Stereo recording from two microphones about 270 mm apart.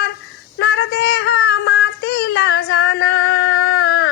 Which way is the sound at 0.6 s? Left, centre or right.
Left.